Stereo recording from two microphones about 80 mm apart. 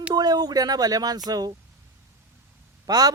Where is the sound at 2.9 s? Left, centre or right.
Right.